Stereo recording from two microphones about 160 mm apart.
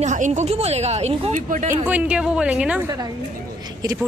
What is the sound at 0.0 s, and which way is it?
Speech, 50° right (ahead or behind).